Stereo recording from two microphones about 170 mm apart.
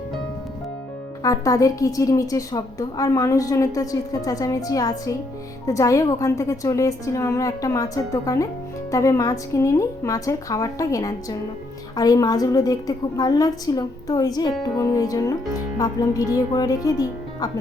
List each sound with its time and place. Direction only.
1.2 s a woman's voice: 20° left (ahead or behind)